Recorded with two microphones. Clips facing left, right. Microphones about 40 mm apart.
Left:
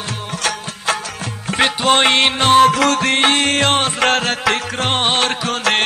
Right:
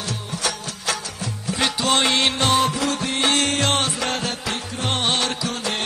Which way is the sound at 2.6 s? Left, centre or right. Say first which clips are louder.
Left 9 dB; left.